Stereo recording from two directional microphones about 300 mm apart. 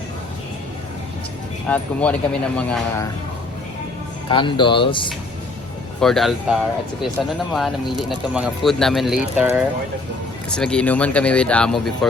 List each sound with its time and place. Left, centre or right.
1.6 s speech: centre
4.3 s speech: centre
6.0 s speech: centre